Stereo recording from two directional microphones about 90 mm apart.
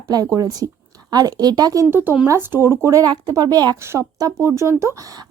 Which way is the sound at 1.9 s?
25° right (ahead or behind).